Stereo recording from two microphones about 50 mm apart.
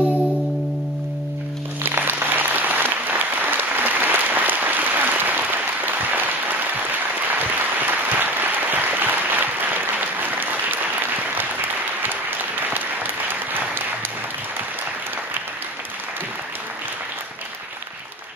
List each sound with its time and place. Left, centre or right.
1.8 s applause: right
7.2 s applause: right
12.0 s applause: right